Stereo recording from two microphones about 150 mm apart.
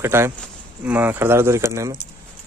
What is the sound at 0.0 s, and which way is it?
Speech, 15° right (ahead or behind).